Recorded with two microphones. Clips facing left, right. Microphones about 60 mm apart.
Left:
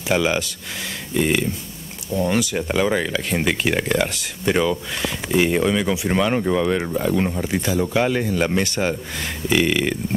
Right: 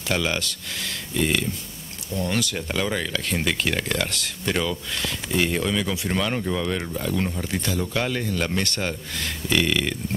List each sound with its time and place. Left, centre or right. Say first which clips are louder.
0.1 s speech: left 5 dB; centre